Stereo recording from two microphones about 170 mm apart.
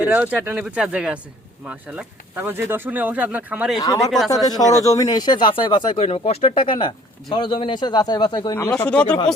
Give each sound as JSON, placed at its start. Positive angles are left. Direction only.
{"t": 0.0, "sound": "speech", "side_deg": -10}
{"t": 3.8, "sound": "speech", "side_deg": 20}
{"t": 8.5, "sound": "speech", "side_deg": 10}